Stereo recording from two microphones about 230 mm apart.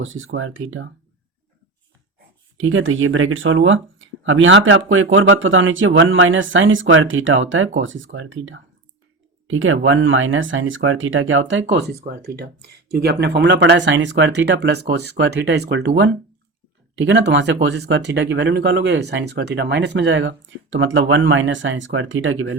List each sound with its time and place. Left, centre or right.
0.0 s speech: right
2.1 s speech: right
17.0 s speech: right